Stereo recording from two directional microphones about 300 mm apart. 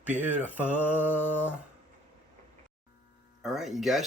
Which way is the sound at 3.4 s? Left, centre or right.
Centre.